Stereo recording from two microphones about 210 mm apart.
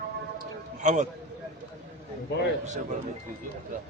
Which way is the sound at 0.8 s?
35° right (ahead or behind).